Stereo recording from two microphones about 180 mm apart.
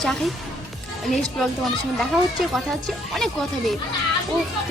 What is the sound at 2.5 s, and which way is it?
Speech, centre (ahead or behind).